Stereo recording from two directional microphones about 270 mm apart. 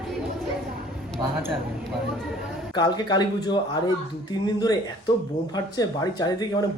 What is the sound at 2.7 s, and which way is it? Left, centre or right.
Speech, centre.